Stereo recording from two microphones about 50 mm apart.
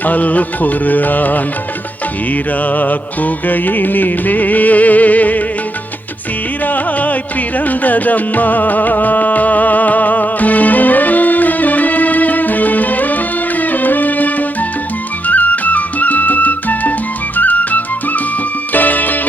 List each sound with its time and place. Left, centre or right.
0.0 s music: left
2.6 s music: left
6.7 s music: left